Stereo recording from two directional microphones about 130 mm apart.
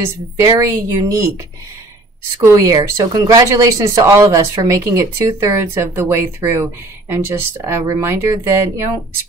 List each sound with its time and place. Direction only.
0.0 s speech: 25° right (ahead or behind)
2.4 s speech: 25° right (ahead or behind)